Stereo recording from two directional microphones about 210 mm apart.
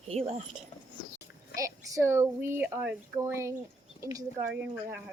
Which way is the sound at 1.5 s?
15° right (ahead or behind).